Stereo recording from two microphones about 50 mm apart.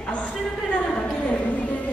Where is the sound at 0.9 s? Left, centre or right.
Left.